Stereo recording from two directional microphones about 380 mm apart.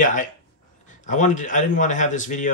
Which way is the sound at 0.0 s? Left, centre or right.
Centre.